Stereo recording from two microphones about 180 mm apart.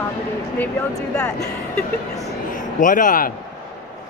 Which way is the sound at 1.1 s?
5° left (ahead or behind).